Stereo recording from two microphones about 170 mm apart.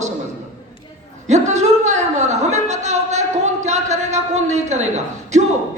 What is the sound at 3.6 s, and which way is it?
A woman's voice, 40° right (ahead or behind).